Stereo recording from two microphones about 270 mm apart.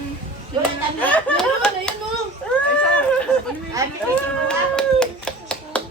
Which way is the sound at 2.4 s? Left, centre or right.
Centre.